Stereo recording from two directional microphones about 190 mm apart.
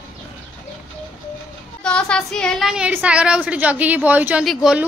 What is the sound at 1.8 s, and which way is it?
A woman's voice, 5° left (ahead or behind).